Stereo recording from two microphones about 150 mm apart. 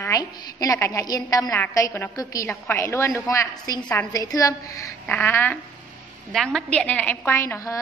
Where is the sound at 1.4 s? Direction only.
10° left (ahead or behind).